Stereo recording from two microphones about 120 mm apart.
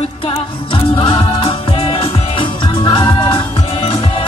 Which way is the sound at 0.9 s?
45° left (ahead or behind).